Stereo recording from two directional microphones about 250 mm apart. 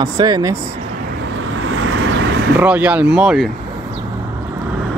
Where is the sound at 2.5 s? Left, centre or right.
Centre.